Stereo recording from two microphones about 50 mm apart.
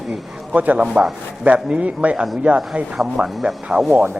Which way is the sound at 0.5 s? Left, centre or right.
Right.